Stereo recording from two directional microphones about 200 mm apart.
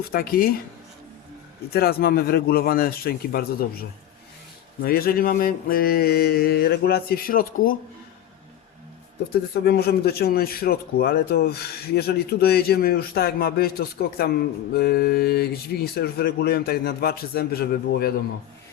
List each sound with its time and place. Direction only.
0.1 s a man's voice: 50° left (ahead or behind)
1.7 s a man's voice: 50° left (ahead or behind)
9.6 s a man's voice: 55° left (ahead or behind)